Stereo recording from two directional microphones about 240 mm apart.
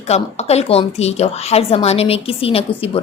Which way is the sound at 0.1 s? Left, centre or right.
Left.